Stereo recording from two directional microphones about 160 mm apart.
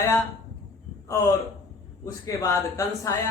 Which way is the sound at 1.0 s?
20° left (ahead or behind).